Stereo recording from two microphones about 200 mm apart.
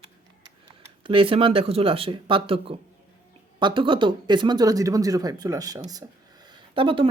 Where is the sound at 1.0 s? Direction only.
25° right (ahead or behind).